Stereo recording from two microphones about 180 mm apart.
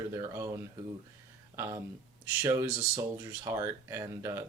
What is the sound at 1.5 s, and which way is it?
Speech, 15° right (ahead or behind).